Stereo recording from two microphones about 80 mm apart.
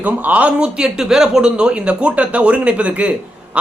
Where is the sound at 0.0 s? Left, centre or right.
Centre.